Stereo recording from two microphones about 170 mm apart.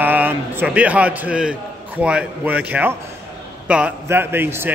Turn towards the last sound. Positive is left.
turn(degrees=-15)  # may be behind; listen again after turning